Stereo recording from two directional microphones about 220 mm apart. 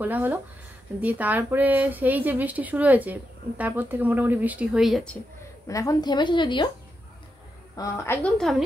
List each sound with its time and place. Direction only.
0.0 s speech: 10° right (ahead or behind)
5.7 s a woman's voice: 15° left (ahead or behind)
7.7 s a woman's voice: 15° left (ahead or behind)